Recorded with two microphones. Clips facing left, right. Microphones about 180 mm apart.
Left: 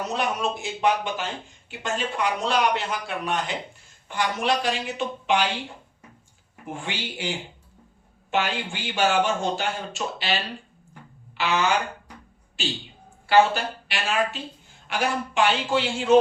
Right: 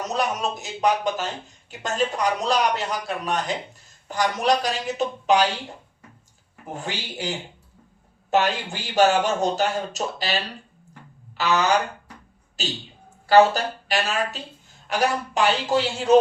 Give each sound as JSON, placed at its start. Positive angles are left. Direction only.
{"t": 0.1, "sound": "speech", "side_deg": -40}
{"t": 6.7, "sound": "speech", "side_deg": -40}
{"t": 11.3, "sound": "speech", "side_deg": -40}